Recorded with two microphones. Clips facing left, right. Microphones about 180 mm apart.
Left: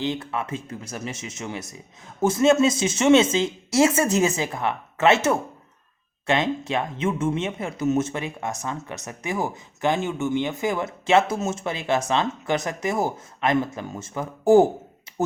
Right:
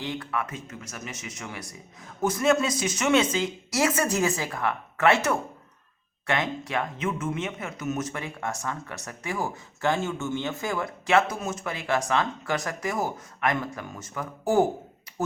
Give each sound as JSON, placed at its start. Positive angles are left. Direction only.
{"t": 0.0, "sound": "speech", "side_deg": 25}